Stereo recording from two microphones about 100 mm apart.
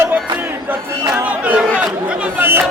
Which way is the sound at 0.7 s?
15° right (ahead or behind).